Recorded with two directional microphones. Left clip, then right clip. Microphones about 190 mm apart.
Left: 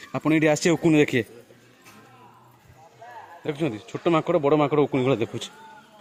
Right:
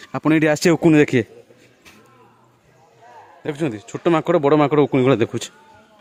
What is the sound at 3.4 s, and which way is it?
Speech, 35° right (ahead or behind).